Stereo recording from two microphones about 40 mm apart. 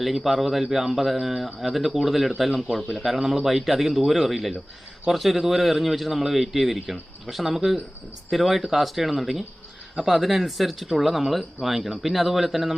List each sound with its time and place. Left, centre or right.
0.0 s a man's voice: centre
3.2 s speech: centre
3.4 s a man's voice: centre